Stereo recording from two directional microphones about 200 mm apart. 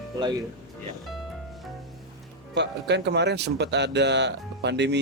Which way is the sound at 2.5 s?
60° right (ahead or behind).